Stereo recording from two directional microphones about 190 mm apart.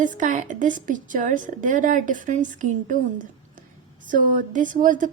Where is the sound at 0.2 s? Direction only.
40° right (ahead or behind).